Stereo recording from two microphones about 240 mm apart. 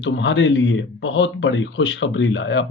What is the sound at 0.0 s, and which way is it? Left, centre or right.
Speech, left.